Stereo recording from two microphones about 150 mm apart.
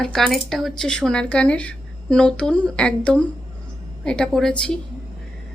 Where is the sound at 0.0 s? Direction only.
5° left (ahead or behind).